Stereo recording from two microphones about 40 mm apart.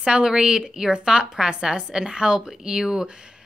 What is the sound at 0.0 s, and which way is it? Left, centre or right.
A woman's voice, right.